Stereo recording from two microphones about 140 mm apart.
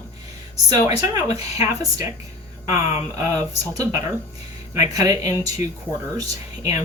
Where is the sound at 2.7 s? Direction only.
20° right (ahead or behind).